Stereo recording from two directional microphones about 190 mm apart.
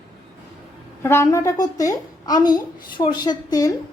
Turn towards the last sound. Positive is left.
turn(degrees=20)  # may be behind; listen again after turning